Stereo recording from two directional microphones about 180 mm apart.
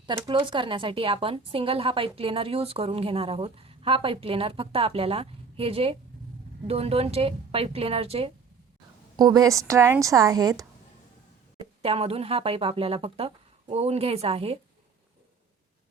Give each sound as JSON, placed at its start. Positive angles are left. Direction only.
{"t": 0.0, "sound": "a woman's voice", "side_deg": -25}
{"t": 9.1, "sound": "a woman's voice", "side_deg": -20}
{"t": 11.6, "sound": "a woman's voice", "side_deg": -30}